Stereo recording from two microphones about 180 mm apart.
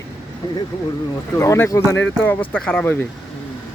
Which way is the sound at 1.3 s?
15° left (ahead or behind).